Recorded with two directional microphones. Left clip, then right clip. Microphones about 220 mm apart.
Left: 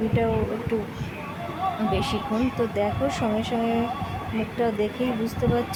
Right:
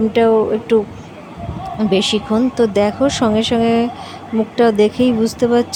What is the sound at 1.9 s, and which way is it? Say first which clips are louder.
Speech: right 10 dB; 30° right (ahead or behind).